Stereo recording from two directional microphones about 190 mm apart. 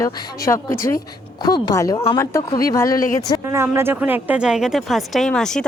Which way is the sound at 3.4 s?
15° right (ahead or behind).